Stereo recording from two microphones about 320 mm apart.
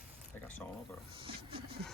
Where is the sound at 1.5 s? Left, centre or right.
Centre.